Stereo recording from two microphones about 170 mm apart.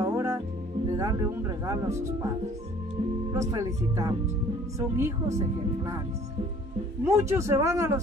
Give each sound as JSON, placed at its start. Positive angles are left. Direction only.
{"t": 0.0, "sound": "music", "side_deg": -20}
{"t": 0.8, "sound": "speech", "side_deg": -20}
{"t": 3.3, "sound": "speech", "side_deg": -20}
{"t": 7.1, "sound": "speech", "side_deg": -15}